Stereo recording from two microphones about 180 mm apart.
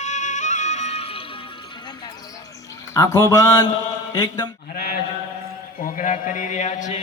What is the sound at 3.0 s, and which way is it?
Speech, 15° left (ahead or behind).